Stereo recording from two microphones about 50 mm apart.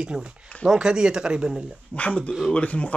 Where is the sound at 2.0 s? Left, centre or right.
Left.